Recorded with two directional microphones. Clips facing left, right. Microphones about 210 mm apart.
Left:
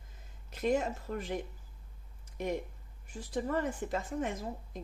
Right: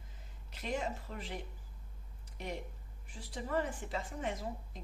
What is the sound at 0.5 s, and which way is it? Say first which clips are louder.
Speech: left 7 dB; 50° left (ahead or behind).